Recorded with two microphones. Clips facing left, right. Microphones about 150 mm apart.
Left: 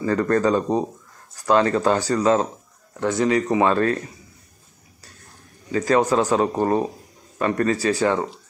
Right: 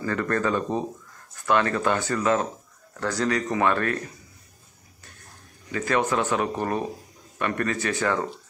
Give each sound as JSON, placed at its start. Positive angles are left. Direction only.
{"t": 0.0, "sound": "speech", "side_deg": 30}
{"t": 3.0, "sound": "speech", "side_deg": 20}
{"t": 5.7, "sound": "speech", "side_deg": 35}